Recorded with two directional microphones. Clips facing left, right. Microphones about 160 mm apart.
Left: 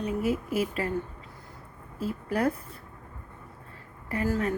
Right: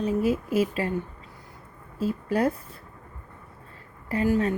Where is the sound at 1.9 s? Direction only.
25° right (ahead or behind).